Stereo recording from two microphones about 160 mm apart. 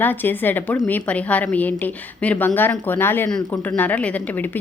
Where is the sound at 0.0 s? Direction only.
10° left (ahead or behind).